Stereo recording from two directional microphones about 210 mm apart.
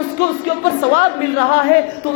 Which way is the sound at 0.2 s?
40° left (ahead or behind).